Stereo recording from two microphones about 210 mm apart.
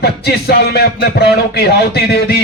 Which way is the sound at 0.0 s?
50° left (ahead or behind).